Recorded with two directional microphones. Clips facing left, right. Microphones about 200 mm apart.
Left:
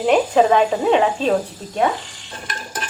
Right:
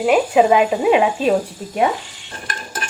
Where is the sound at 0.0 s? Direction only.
5° right (ahead or behind).